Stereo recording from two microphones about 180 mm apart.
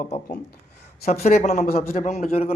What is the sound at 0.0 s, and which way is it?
A man's voice, 45° left (ahead or behind).